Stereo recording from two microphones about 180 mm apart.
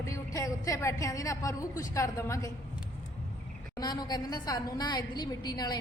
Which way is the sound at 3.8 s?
20° left (ahead or behind).